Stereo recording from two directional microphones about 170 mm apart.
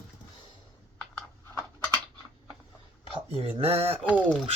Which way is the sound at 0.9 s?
10° left (ahead or behind).